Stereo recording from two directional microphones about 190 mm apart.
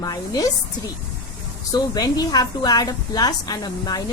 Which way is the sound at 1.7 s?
20° left (ahead or behind).